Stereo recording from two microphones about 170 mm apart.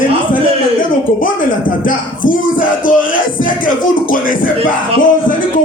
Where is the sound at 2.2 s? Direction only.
55° left (ahead or behind).